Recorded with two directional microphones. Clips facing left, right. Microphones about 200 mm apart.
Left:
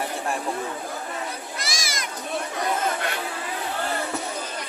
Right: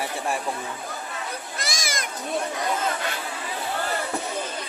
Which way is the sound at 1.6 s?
55° right (ahead or behind).